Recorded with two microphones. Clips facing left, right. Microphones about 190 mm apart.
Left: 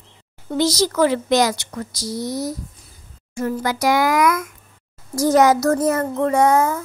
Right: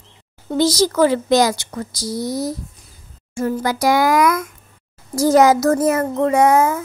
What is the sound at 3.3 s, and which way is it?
A woman's voice, 30° right (ahead or behind).